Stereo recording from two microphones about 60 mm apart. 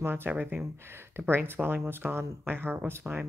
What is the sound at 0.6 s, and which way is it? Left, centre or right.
Speech, right.